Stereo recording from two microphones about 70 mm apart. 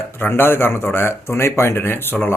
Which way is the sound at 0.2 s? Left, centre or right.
Left.